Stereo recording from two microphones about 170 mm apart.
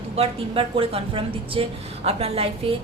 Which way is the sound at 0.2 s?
35° right (ahead or behind).